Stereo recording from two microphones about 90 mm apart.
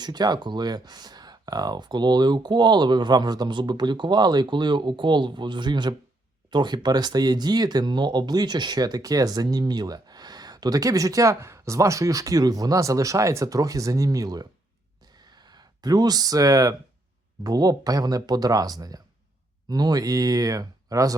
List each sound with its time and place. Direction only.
0.0 s speech: 50° right (ahead or behind)
15.1 s a sound: 50° right (ahead or behind)
17.4 s speech: 45° right (ahead or behind)